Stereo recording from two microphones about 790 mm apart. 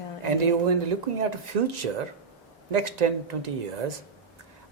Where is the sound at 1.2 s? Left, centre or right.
Right.